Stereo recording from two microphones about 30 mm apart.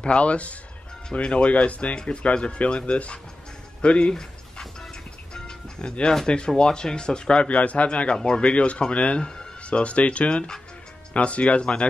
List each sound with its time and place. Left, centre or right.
0.0 s speech: left
4.1 s dog: centre
5.3 s music: left
6.2 s speech: left
7.4 s speech: left